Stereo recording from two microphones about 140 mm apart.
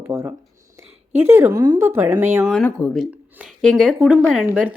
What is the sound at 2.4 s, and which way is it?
Speech, 5° left (ahead or behind).